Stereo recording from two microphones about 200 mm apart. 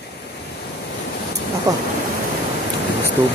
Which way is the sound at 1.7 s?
15° right (ahead or behind).